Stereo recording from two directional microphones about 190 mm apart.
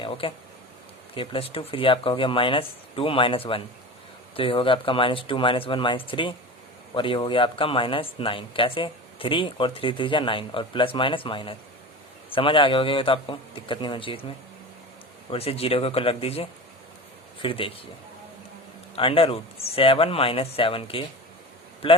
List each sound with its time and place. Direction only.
0.0 s speech: 30° left (ahead or behind)
15.3 s speech: 30° left (ahead or behind)
18.9 s speech: 30° left (ahead or behind)